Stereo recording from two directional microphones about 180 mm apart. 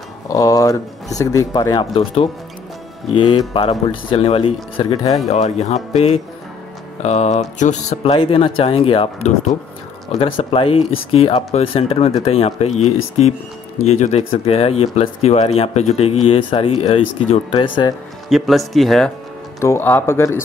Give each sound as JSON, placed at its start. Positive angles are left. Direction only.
{"t": 0.3, "sound": "speech", "side_deg": 20}
{"t": 5.3, "sound": "speech", "side_deg": 40}
{"t": 18.3, "sound": "speech", "side_deg": 0}
{"t": 19.6, "sound": "speech", "side_deg": 15}